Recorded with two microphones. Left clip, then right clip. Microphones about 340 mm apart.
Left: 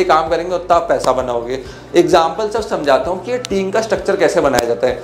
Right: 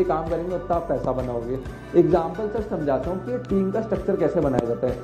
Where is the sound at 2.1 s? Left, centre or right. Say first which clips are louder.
Left 10 dB; centre.